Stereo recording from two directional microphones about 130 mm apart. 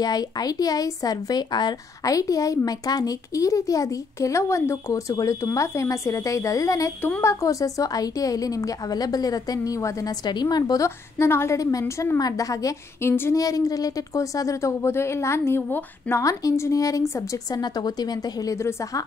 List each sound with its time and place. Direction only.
0.0 s a woman's voice: 30° left (ahead or behind)
12.2 s a woman's voice: 25° left (ahead or behind)